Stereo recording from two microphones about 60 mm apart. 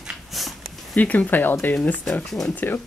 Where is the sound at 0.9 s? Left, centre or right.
Left.